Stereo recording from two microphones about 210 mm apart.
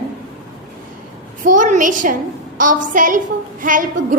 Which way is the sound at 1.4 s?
40° right (ahead or behind).